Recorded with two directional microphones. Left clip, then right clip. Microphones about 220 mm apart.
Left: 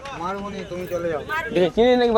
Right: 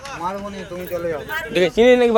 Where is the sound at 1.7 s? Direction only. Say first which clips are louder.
Right 5 dB; 40° right (ahead or behind).